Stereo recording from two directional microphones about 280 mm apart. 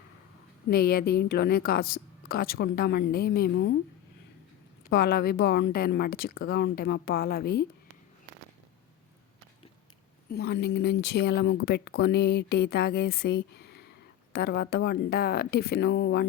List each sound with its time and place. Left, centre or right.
0.7 s speech: left
4.9 s speech: left
10.2 s speech: left